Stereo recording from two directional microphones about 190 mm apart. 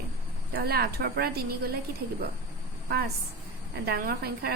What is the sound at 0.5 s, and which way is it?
Speech, 55° right (ahead or behind).